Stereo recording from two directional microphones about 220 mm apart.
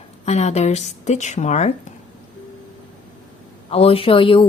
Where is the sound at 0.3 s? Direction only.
30° left (ahead or behind).